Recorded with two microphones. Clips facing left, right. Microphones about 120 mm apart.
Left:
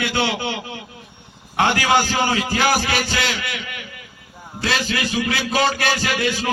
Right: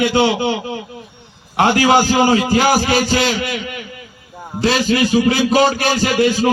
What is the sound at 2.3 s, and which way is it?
Speech, 25° right (ahead or behind).